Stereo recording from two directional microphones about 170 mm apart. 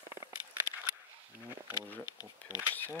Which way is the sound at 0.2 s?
20° right (ahead or behind).